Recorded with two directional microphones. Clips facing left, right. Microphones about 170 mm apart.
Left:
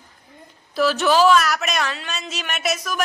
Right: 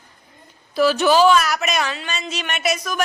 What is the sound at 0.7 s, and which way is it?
Speech, centre (ahead or behind).